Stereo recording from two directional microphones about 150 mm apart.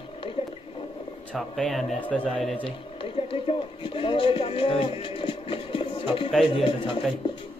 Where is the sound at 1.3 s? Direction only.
5° left (ahead or behind).